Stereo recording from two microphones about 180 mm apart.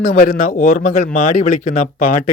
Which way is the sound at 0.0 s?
50° left (ahead or behind).